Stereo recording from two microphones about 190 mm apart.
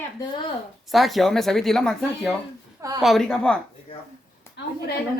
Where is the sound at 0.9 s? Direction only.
Centre (ahead or behind).